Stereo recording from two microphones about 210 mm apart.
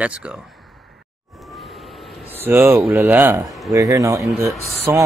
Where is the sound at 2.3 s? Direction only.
10° right (ahead or behind).